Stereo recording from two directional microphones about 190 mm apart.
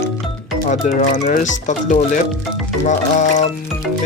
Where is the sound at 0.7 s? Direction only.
40° left (ahead or behind).